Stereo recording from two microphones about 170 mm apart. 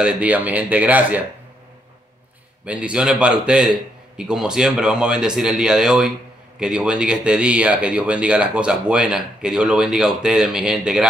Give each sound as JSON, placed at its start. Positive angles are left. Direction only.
{"t": 0.0, "sound": "speech", "side_deg": -10}
{"t": 2.6, "sound": "speech", "side_deg": -5}